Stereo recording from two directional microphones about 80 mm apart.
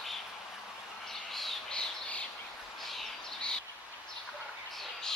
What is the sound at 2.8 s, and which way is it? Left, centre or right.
Bird, centre.